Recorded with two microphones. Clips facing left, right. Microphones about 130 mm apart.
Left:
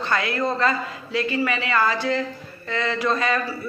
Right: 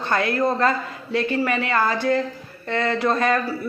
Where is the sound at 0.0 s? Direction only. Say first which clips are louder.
Right 3 dB; 50° right (ahead or behind).